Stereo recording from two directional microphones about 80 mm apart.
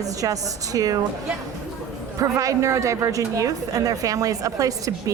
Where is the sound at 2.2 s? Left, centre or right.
Right.